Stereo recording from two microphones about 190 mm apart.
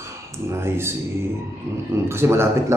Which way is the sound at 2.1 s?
15° right (ahead or behind).